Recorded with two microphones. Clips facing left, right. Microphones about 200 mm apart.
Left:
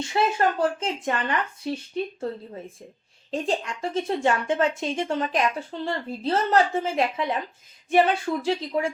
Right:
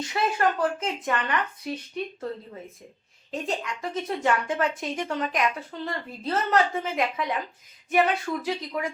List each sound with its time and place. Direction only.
0.0 s speech: 25° left (ahead or behind)
3.3 s speech: 30° left (ahead or behind)